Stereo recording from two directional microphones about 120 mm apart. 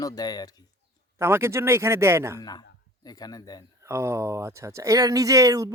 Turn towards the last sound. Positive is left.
turn(degrees=-30)  # may be behind; listen again after turning